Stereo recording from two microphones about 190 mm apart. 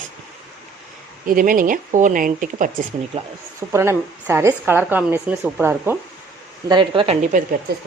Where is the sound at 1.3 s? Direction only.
45° right (ahead or behind).